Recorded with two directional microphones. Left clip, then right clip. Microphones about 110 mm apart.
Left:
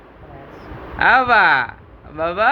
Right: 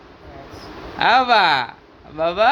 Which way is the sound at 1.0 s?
30° right (ahead or behind).